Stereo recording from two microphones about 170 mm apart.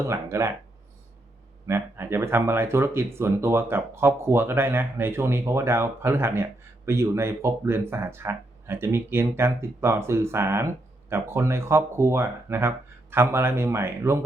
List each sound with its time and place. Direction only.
0.1 s speech: 15° right (ahead or behind)
1.6 s speech: 15° right (ahead or behind)